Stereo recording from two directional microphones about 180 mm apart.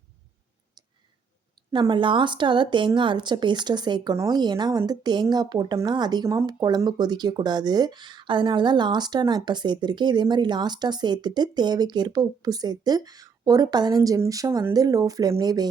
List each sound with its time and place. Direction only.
1.7 s speech: 25° right (ahead or behind)